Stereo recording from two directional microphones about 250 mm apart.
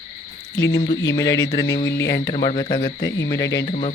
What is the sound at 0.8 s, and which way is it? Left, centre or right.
Speech, centre.